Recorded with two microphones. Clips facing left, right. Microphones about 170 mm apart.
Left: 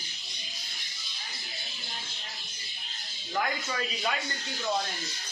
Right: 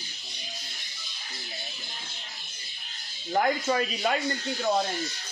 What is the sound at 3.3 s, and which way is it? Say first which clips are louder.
Speech: right 7 dB; 45° right (ahead or behind).